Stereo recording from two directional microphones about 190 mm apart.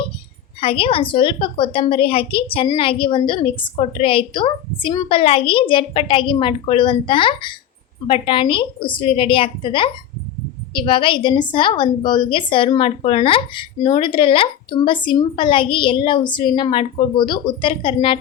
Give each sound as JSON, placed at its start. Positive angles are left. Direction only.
{"t": 0.6, "sound": "a woman's voice", "side_deg": 30}